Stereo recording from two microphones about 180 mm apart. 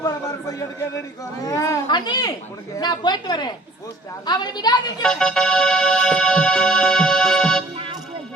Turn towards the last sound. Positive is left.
turn(degrees=0)  # may be behind; listen again after turning